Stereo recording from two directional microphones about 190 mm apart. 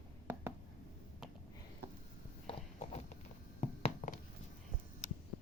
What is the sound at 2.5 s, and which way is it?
Horse, 35° left (ahead or behind).